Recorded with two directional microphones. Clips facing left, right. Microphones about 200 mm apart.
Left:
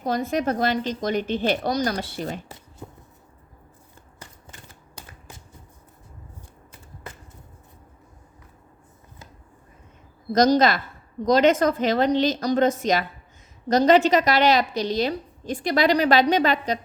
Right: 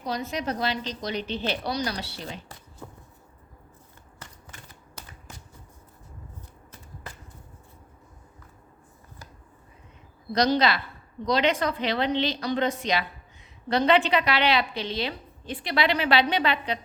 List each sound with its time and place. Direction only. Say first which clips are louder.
0.0 s a woman's voice: left 6 dB; 50° left (ahead or behind)
10.3 s a woman's voice: left 5 dB; 45° left (ahead or behind)